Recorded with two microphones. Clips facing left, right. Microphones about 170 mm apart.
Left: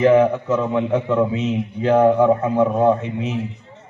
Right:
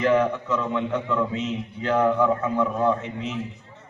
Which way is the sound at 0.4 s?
50° left (ahead or behind).